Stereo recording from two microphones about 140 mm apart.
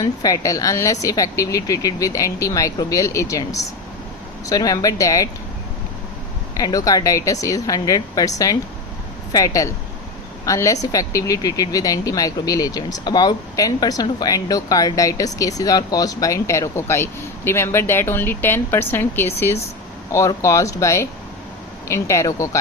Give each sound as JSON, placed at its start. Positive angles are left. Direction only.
{"t": 0.0, "sound": "speech", "side_deg": 25}
{"t": 6.6, "sound": "speech", "side_deg": 25}